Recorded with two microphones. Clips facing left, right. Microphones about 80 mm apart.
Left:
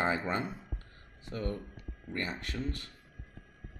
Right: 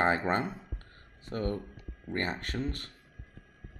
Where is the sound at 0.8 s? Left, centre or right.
Right.